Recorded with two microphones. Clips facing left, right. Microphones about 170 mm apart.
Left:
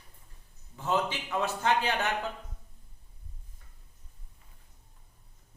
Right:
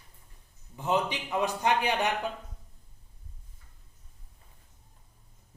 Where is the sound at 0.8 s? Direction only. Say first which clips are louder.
Right 1 dB; 15° right (ahead or behind).